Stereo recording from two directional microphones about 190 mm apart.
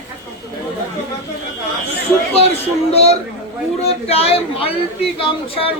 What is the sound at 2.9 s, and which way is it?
Speech, 35° left (ahead or behind).